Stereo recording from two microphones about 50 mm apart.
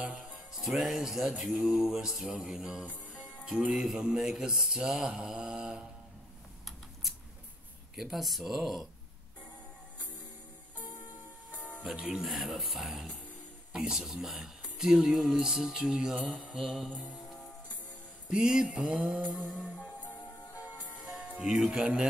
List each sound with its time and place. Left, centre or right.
0.6 s speech: centre
7.9 s speech: centre
11.8 s speech: centre
16.5 s speech: centre
18.3 s mantra: centre
19.4 s music: centre
21.0 s music: centre
21.4 s speech: centre